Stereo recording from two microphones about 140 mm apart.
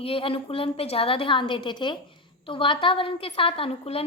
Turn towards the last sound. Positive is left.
turn(degrees=40)  # may be behind; listen again after turning